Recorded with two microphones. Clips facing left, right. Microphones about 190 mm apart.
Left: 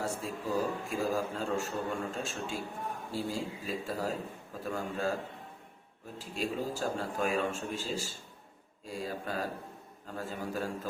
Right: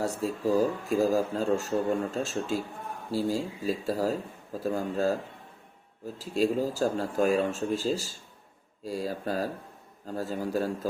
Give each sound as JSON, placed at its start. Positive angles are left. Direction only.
{"t": 0.0, "sound": "speech", "side_deg": -40}
{"t": 6.1, "sound": "speech", "side_deg": -40}